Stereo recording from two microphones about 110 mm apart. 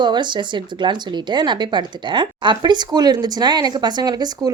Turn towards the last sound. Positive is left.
turn(degrees=-40)  # may be behind; listen again after turning